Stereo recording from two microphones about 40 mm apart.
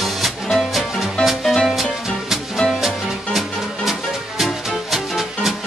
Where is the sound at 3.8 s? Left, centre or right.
Centre.